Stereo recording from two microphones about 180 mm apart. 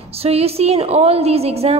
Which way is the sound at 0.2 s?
35° right (ahead or behind).